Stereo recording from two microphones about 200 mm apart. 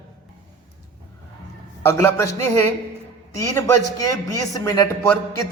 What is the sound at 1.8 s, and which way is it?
Speech, 15° left (ahead or behind).